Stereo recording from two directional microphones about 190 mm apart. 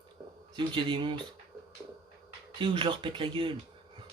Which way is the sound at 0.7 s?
25° right (ahead or behind).